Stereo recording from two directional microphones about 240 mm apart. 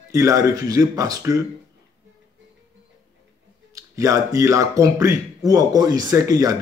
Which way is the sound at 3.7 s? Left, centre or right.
Centre.